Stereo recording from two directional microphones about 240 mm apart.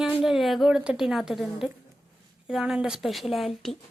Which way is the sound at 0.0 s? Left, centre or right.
Centre.